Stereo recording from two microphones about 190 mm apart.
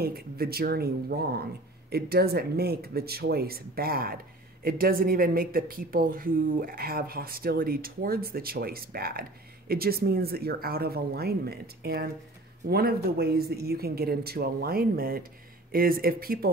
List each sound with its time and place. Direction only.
0.0 s speech: 55° right (ahead or behind)